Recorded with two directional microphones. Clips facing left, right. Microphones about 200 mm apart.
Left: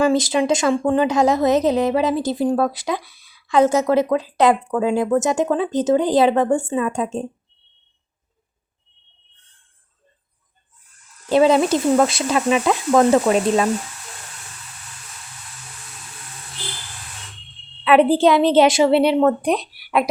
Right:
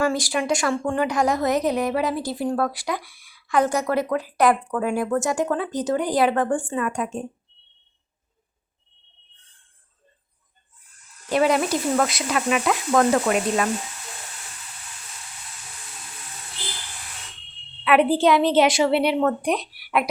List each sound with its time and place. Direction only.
0.0 s speech: 20° left (ahead or behind)
11.3 s speech: 25° left (ahead or behind)
17.8 s speech: 25° left (ahead or behind)